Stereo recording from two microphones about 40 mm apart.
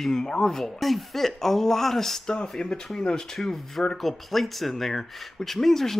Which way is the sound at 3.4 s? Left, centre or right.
Centre.